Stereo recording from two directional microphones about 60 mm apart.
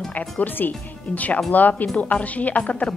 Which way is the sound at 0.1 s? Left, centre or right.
Left.